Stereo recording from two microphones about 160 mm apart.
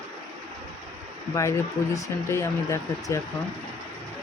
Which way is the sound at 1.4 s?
20° left (ahead or behind).